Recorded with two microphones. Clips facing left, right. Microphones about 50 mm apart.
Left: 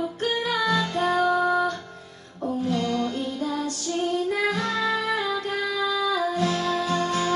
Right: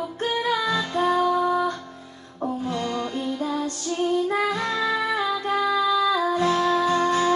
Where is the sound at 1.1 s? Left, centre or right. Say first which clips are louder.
Left 2 dB; left.